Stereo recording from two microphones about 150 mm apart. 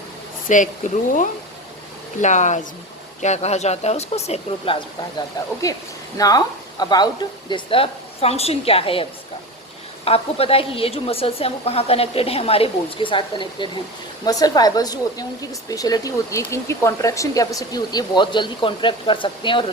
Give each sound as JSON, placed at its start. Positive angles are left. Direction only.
{"t": 0.4, "sound": "speech", "side_deg": 60}
{"t": 2.2, "sound": "speech", "side_deg": 55}
{"t": 5.6, "sound": "a woman's voice", "side_deg": 20}